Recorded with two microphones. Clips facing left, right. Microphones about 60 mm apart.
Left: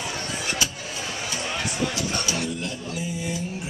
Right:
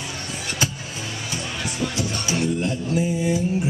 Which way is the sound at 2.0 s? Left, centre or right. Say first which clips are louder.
Right 3 dB; right.